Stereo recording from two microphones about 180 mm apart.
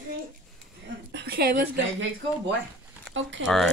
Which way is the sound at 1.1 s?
65° right (ahead or behind).